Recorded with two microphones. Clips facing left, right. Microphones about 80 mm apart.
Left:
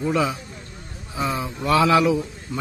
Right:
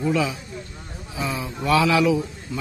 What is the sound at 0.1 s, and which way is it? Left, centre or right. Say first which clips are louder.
A man's voice: left 1 dB; left.